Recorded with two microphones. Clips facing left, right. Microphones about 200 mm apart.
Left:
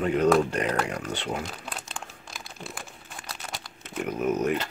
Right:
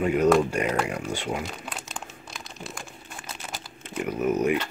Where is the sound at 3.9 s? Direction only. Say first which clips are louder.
Right 2 dB; 5° right (ahead or behind).